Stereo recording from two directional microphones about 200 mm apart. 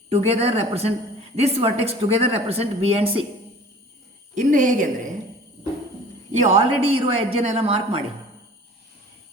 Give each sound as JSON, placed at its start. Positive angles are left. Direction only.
{"t": 0.1, "sound": "a woman's voice", "side_deg": -30}
{"t": 4.4, "sound": "a woman's voice", "side_deg": -40}
{"t": 6.3, "sound": "a woman's voice", "side_deg": -35}